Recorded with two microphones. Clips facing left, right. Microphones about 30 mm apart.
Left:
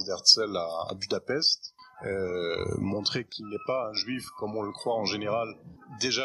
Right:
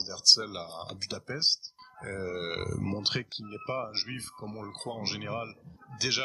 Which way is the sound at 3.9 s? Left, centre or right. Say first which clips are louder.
Left 4 dB; centre.